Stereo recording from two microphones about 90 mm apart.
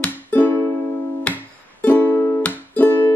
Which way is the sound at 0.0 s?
15° left (ahead or behind).